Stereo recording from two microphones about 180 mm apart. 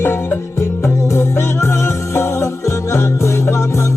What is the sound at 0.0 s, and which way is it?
Music, 15° left (ahead or behind).